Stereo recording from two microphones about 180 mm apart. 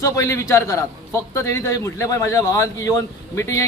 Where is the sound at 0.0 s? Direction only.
15° left (ahead or behind).